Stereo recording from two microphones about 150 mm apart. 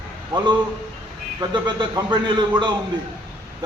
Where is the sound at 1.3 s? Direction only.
30° right (ahead or behind).